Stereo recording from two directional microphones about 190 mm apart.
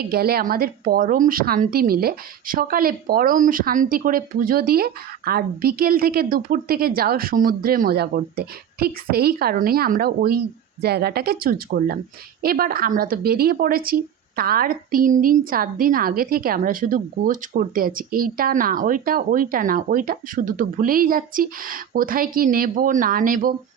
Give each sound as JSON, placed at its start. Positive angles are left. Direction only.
{"t": 0.0, "sound": "a woman's voice", "side_deg": -55}